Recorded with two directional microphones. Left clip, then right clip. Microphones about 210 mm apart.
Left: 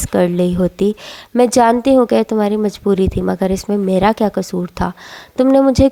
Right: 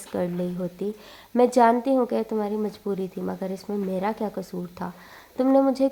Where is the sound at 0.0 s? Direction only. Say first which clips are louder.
Left 13 dB; 35° left (ahead or behind).